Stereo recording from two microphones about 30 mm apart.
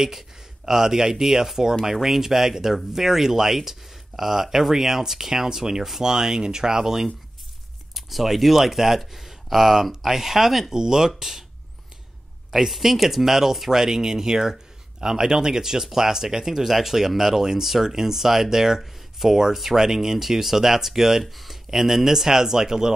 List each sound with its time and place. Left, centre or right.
0.7 s speech: centre
7.9 s speech: centre
10.7 s speech: right
12.4 s speech: centre
18.8 s a sound: centre
19.5 s speech: centre
21.2 s speech: centre
21.6 s speech: centre